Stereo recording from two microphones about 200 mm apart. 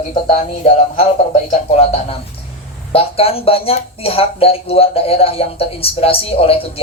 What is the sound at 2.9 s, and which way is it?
Speech, 30° left (ahead or behind).